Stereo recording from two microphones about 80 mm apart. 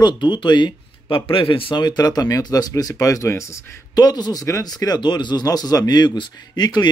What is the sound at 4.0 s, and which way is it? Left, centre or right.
Speech, left.